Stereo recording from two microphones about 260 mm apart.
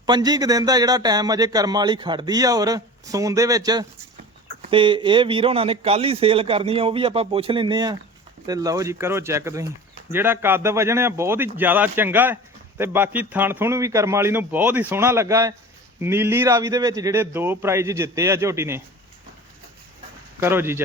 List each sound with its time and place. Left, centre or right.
0.0 s a man's voice: centre
20.4 s speech: centre